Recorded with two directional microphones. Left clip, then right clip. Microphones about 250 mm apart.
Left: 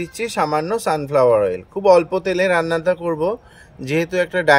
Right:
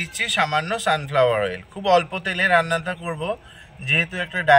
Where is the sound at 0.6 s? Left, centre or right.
Left.